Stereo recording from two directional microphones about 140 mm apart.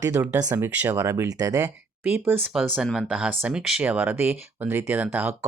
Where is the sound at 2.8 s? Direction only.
5° left (ahead or behind).